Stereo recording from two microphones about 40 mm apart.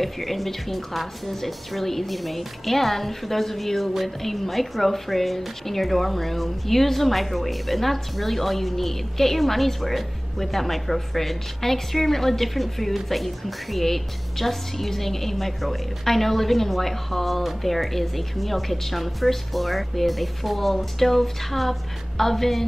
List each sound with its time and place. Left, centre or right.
0.0 s a woman's voice: centre